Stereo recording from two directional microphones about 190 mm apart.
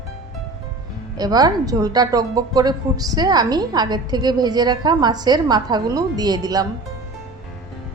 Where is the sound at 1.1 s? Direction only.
20° right (ahead or behind).